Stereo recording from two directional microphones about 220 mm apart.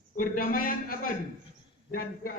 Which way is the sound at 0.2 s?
40° left (ahead or behind).